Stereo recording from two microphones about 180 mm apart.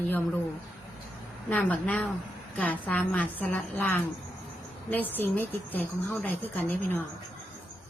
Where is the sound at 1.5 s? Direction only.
10° left (ahead or behind).